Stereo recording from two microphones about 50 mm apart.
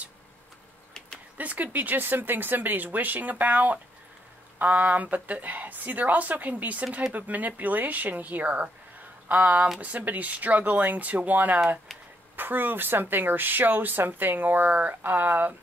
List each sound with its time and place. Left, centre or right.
1.4 s speech: right